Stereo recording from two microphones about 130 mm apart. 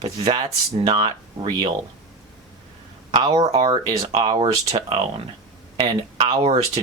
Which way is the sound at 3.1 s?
40° right (ahead or behind).